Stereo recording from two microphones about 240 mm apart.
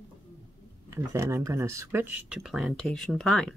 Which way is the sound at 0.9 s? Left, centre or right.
Centre.